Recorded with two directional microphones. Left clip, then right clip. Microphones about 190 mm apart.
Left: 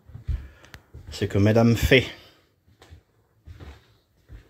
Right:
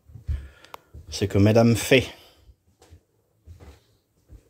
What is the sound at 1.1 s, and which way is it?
Speech, 15° right (ahead or behind).